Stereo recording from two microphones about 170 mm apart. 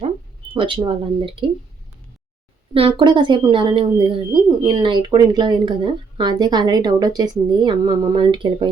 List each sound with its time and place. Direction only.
0.5 s speech: 30° right (ahead or behind)
2.7 s speech: 30° right (ahead or behind)